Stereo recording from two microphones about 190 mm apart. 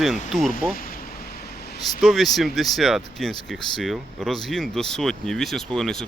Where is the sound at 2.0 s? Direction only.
Centre (ahead or behind).